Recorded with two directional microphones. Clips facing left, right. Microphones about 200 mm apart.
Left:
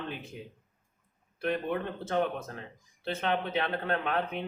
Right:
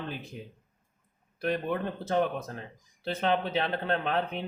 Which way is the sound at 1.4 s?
35° right (ahead or behind).